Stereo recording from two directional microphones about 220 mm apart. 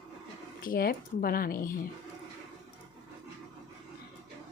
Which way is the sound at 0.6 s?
40° left (ahead or behind).